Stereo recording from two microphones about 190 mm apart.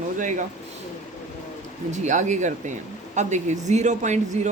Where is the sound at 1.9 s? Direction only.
40° right (ahead or behind).